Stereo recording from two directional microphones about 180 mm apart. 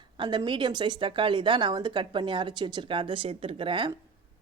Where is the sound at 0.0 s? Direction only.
25° right (ahead or behind).